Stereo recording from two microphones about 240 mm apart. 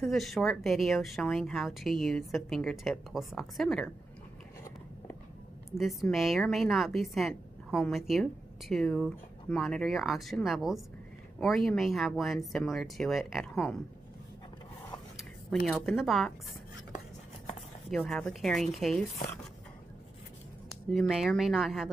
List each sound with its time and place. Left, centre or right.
0.0 s a woman's voice: centre
5.8 s a woman's voice: centre
15.1 s speech: centre
17.9 s a woman's voice: centre
20.9 s a woman's voice: centre